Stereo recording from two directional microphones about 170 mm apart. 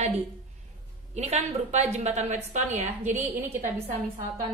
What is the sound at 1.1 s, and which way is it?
A woman's voice, 40° right (ahead or behind).